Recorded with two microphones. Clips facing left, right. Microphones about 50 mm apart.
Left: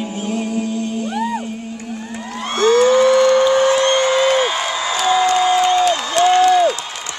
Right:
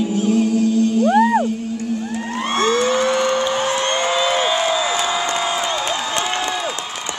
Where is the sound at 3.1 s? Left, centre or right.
Right.